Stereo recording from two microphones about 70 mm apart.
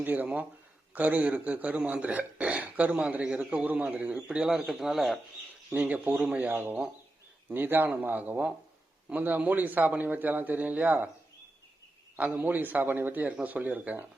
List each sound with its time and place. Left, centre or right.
0.0 s a man's voice: right; by 5.2 s centre
5.7 s a man's voice: right
12.1 s a man's voice: right